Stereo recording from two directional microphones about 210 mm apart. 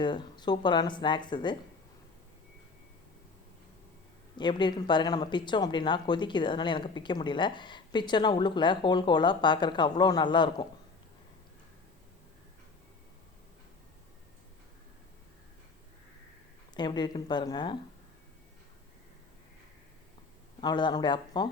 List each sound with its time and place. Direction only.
0.0 s speech: 20° left (ahead or behind)
4.4 s speech: 20° left (ahead or behind)
16.7 s speech: 20° left (ahead or behind)
20.6 s speech: 20° left (ahead or behind)